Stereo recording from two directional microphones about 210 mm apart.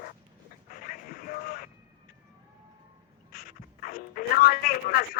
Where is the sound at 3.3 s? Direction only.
45° left (ahead or behind).